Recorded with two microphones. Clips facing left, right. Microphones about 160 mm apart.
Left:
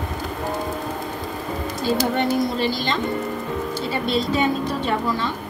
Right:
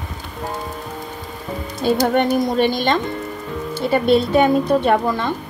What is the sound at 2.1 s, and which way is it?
A woman's voice, 55° right (ahead or behind).